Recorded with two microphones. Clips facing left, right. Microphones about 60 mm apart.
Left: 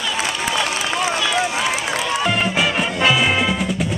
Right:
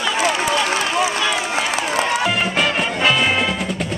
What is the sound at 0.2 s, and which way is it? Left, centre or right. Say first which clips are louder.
Run: right 3 dB; right.